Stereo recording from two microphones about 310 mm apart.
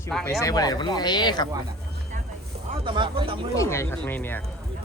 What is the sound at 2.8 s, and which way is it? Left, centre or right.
Speech, centre.